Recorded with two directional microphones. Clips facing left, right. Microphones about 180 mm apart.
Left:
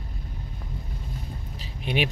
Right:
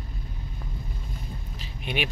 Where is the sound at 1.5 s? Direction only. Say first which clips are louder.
Left 4 dB; 35° left (ahead or behind).